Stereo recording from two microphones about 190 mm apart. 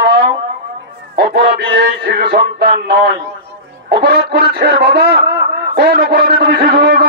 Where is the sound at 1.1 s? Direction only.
60° right (ahead or behind).